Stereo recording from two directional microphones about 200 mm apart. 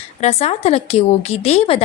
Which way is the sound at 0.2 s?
30° left (ahead or behind).